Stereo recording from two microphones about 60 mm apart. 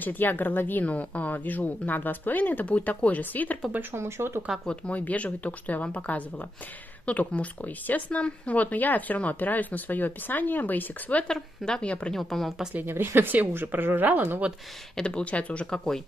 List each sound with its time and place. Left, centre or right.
0.0 s speech: left
3.9 s speech: right
4.6 s speech: left
11.2 s speech: centre
12.1 s speech: centre
12.8 s speech: right
15.0 s speech: centre